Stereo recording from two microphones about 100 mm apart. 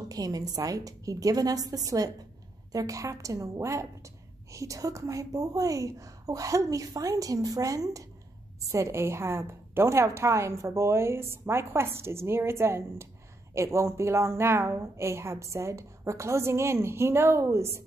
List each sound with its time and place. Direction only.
0.1 s a woman's voice: 40° right (ahead or behind)